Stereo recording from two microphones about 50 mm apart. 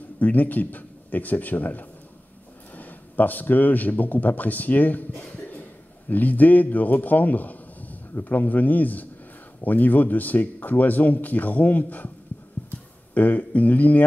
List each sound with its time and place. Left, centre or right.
0.2 s a man's voice: left
5.1 s speech: left
12.6 s music: left
13.1 s speech: left